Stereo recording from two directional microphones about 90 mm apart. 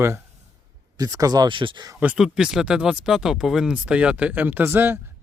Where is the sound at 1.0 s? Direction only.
40° right (ahead or behind).